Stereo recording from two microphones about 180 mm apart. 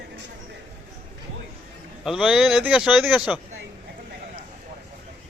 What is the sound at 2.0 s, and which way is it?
Speech, centre (ahead or behind).